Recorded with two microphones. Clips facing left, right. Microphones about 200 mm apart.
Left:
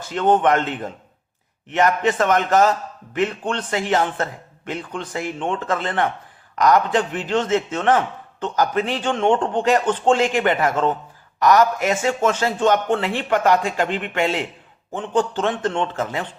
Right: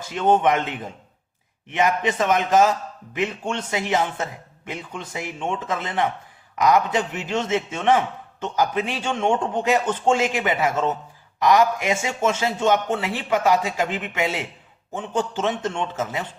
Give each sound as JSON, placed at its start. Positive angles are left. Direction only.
{"t": 0.1, "sound": "speech", "side_deg": -10}